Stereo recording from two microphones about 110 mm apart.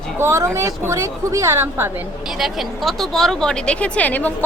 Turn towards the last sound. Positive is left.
turn(degrees=15)  # may be behind; listen again after turning